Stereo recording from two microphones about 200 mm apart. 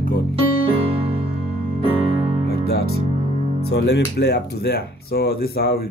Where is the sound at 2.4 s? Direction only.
50° left (ahead or behind).